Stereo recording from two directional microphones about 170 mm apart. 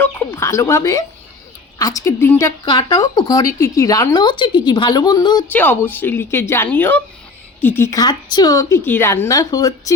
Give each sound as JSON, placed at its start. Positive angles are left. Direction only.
{"t": 0.0, "sound": "a sound", "side_deg": 15}
{"t": 1.8, "sound": "a woman's voice", "side_deg": 20}
{"t": 5.5, "sound": "a woman's voice", "side_deg": 10}